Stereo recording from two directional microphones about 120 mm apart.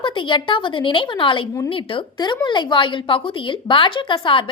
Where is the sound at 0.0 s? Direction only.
40° left (ahead or behind).